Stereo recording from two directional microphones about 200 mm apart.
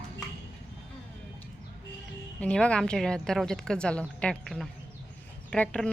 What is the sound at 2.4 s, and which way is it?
Speech, 5° left (ahead or behind).